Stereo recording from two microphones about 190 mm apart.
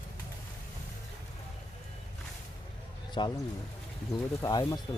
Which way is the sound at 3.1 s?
25° left (ahead or behind).